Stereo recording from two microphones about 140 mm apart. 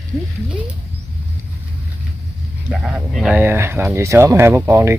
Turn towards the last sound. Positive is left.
turn(degrees=-20)  # may be behind; listen again after turning